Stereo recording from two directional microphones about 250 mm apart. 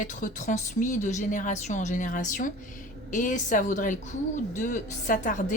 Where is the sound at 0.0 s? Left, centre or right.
Left.